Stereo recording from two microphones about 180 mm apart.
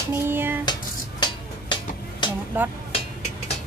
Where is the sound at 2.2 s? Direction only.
25° left (ahead or behind).